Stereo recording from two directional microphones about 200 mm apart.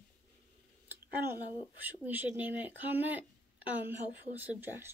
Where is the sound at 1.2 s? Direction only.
10° right (ahead or behind).